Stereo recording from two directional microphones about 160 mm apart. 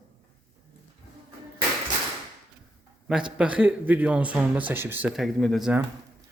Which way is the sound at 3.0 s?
5° right (ahead or behind).